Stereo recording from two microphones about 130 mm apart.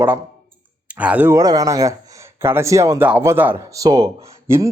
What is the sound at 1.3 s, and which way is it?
Speech, 30° right (ahead or behind).